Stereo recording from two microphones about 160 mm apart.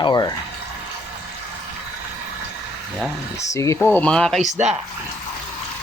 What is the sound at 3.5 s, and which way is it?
Speech, 20° left (ahead or behind).